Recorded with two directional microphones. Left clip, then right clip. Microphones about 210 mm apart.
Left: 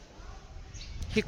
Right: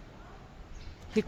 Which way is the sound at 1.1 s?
10° right (ahead or behind).